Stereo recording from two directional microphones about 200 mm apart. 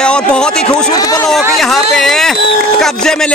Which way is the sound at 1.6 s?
Centre (ahead or behind).